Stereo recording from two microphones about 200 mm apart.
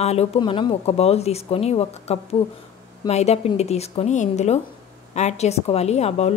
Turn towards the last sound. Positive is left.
turn(degrees=35)  # may be behind; listen again after turning